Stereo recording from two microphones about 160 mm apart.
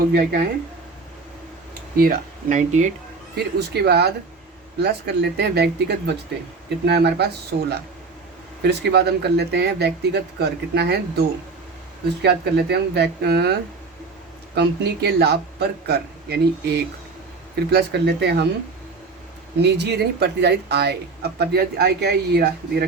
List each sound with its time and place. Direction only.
0.1 s speech: 75° right (ahead or behind)
2.0 s speech: 60° right (ahead or behind)
3.3 s speech: 90° right
8.6 s speech: 90° right
12.2 s speech: 90° right
19.6 s speech: 90° right